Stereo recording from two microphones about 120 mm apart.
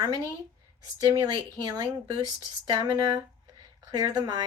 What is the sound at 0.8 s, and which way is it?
Speech, 35° right (ahead or behind).